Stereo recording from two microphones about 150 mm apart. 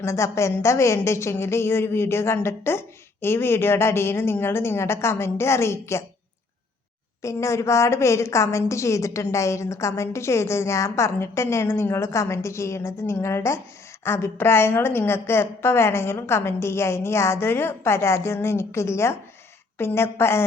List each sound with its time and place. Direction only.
0.0 s a woman's voice: 20° left (ahead or behind)
7.2 s a woman's voice: 20° left (ahead or behind)